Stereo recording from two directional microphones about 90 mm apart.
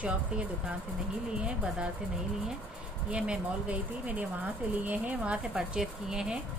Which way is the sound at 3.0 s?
10° right (ahead or behind).